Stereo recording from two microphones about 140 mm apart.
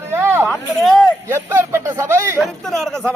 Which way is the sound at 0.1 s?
15° right (ahead or behind).